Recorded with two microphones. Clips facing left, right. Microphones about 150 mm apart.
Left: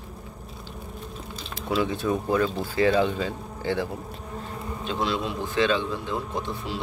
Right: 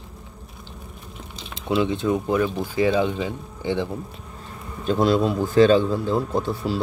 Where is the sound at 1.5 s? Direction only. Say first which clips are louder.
Right 4 dB; 20° right (ahead or behind).